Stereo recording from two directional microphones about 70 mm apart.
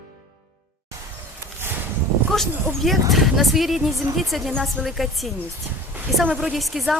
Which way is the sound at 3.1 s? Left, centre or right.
Centre.